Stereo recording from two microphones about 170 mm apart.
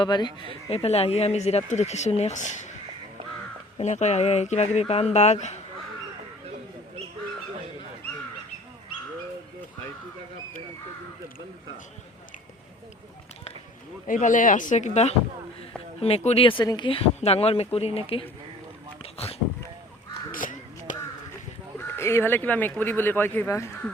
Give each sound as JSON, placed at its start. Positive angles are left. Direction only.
{"t": 0.0, "sound": "speech", "side_deg": 25}
{"t": 3.8, "sound": "speech", "side_deg": 45}
{"t": 14.1, "sound": "speech", "side_deg": 50}
{"t": 19.0, "sound": "a sound", "side_deg": 35}
{"t": 20.3, "sound": "crow", "side_deg": 50}
{"t": 21.8, "sound": "speech", "side_deg": 15}